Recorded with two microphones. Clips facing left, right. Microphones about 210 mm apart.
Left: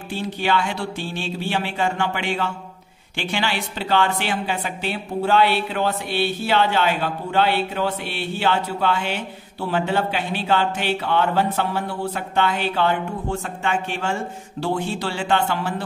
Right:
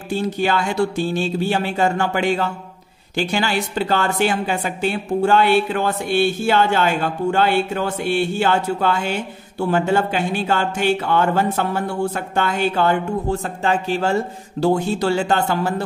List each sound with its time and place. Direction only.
0.1 s a woman's voice: 45° right (ahead or behind)